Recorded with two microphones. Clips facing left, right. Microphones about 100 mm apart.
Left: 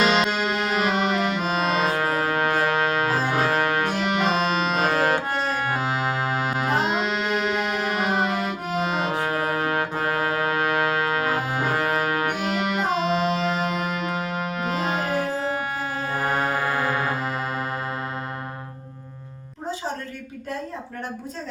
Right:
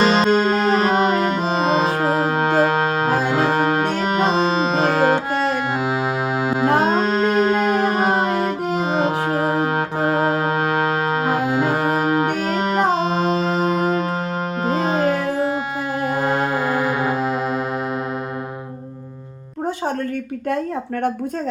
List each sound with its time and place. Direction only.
0.0 s music: 35° right (ahead or behind)
3.9 s music: 40° right (ahead or behind); by 6.7 s 20° right (ahead or behind)
6.8 s music: 40° right (ahead or behind)
12.4 s music: 40° right (ahead or behind); by 17.3 s 20° right (ahead or behind)